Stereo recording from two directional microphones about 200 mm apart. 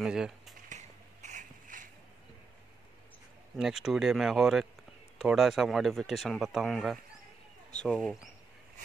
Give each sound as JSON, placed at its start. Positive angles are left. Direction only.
{"t": 0.0, "sound": "speech", "side_deg": 0}
{"t": 0.7, "sound": "a sound", "side_deg": -35}
{"t": 3.5, "sound": "speech", "side_deg": 0}